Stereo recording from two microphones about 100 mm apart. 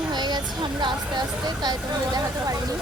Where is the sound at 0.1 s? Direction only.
45° right (ahead or behind).